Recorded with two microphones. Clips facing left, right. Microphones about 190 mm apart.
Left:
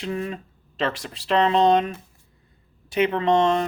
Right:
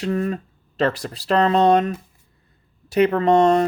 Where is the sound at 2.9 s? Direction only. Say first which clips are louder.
Right 4 dB; 40° right (ahead or behind).